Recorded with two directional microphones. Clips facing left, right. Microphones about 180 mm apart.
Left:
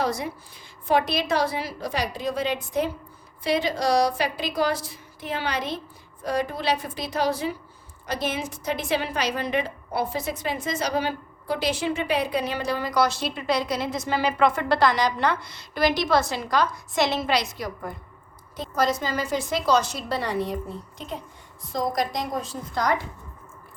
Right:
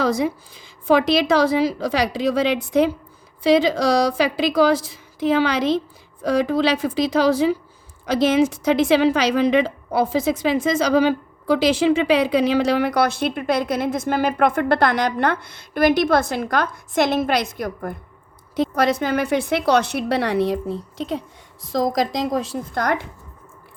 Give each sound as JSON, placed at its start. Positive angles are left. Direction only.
{"t": 0.0, "sound": "a woman's voice", "side_deg": -90}
{"t": 18.5, "sound": "a woman's voice", "side_deg": -80}
{"t": 22.7, "sound": "a woman's voice", "side_deg": -55}